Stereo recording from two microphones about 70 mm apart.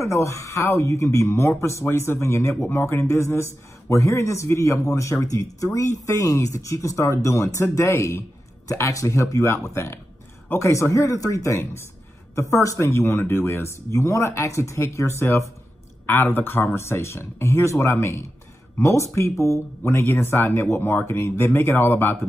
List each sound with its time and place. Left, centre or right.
0.0 s a man's voice: left
16.1 s a man's voice: left